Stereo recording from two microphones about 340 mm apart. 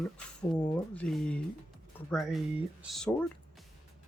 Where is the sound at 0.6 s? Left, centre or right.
Centre.